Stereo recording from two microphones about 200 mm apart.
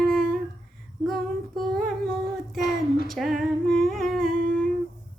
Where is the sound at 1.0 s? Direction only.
Centre (ahead or behind).